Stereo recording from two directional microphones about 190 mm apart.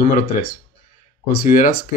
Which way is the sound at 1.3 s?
50° left (ahead or behind).